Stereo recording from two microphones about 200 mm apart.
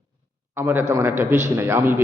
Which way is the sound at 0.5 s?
10° right (ahead or behind).